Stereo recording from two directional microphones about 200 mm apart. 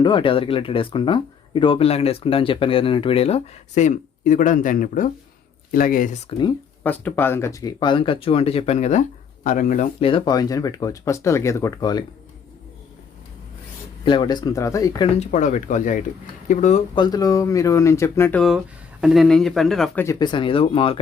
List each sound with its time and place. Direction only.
0.0 s speech: 25° left (ahead or behind); by 6.1 s 45° left (ahead or behind)
6.8 s speech: 10° left (ahead or behind); by 9.8 s 40° left (ahead or behind)
10.0 s speech: 25° left (ahead or behind)
14.0 s speech: 25° left (ahead or behind)
15.2 s speech: 35° left (ahead or behind); by 20.1 s centre (ahead or behind)
20.1 s speech: 20° left (ahead or behind)